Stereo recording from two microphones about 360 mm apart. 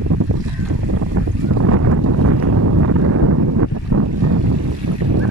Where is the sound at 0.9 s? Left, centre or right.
Right.